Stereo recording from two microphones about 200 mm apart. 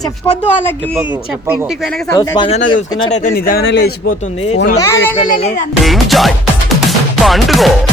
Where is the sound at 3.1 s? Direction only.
45° left (ahead or behind).